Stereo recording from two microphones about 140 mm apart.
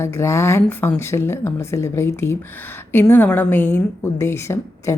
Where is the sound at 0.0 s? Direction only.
20° left (ahead or behind).